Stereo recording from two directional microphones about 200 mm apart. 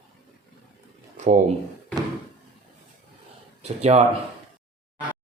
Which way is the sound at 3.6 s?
30° right (ahead or behind).